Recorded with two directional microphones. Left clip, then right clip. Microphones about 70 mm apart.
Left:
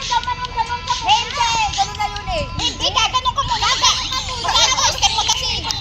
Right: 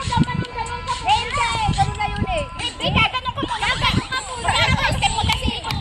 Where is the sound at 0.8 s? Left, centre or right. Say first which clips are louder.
Left 2 dB; right.